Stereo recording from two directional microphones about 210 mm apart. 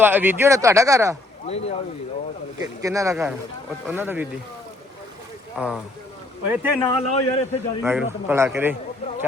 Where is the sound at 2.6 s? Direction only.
15° right (ahead or behind).